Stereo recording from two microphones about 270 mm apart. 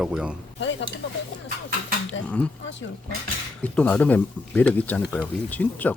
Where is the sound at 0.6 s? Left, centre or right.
Left.